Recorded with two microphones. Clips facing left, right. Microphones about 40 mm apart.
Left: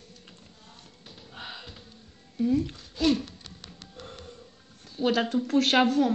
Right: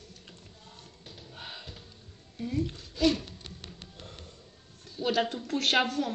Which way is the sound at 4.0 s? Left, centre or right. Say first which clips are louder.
Left 8 dB; left.